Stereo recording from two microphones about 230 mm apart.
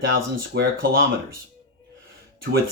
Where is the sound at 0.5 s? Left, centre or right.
Right.